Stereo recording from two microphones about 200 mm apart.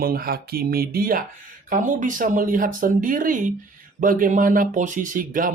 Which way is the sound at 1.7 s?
40° right (ahead or behind).